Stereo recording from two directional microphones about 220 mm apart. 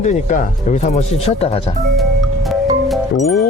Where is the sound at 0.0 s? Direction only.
35° left (ahead or behind).